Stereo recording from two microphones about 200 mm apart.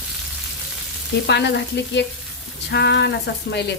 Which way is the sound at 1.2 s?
60° left (ahead or behind).